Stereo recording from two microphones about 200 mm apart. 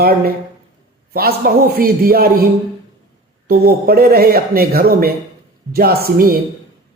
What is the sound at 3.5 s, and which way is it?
A man's voice, 50° right (ahead or behind).